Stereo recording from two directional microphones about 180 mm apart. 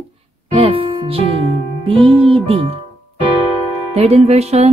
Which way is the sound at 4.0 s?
35° right (ahead or behind).